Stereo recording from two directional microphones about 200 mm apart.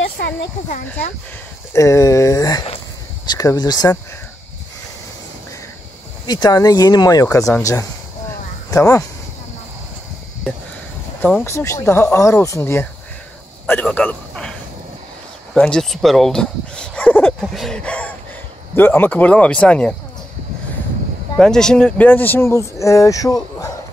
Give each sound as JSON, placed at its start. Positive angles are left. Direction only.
{"t": 1.7, "sound": "speech", "side_deg": 15}
{"t": 6.2, "sound": "speech", "side_deg": 20}
{"t": 11.1, "sound": "a man's voice", "side_deg": 10}
{"t": 15.5, "sound": "speech", "side_deg": 5}
{"t": 21.4, "sound": "speech", "side_deg": 5}